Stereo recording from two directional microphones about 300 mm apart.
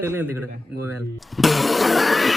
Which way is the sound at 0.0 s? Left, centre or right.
Centre.